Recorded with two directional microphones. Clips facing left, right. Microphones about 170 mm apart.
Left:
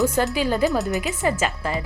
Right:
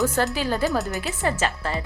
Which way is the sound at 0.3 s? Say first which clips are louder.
Left 3 dB; 15° left (ahead or behind).